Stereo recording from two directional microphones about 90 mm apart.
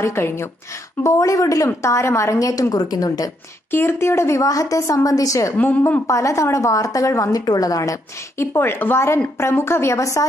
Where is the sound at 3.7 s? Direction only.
25° left (ahead or behind).